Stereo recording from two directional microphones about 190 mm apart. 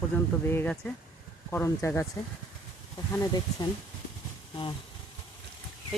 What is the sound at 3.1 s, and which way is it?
Speech, 20° left (ahead or behind).